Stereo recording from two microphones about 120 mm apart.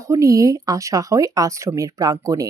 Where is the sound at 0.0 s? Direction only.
25° right (ahead or behind).